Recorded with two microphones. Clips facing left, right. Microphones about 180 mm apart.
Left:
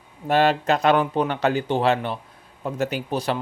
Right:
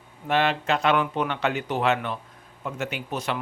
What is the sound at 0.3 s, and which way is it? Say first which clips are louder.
Speech: left 4 dB; 40° left (ahead or behind).